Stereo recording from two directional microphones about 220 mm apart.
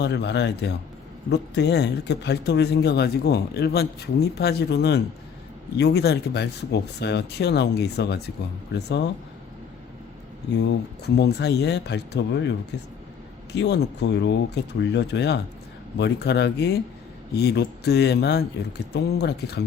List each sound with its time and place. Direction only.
0.0 s speech: 50° left (ahead or behind)
11.0 s speech: 50° left (ahead or behind)